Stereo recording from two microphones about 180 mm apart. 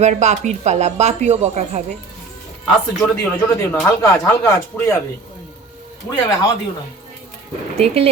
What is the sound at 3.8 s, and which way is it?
Speech, 15° left (ahead or behind).